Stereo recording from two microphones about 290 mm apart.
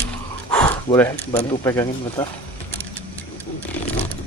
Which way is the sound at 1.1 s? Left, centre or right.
Left.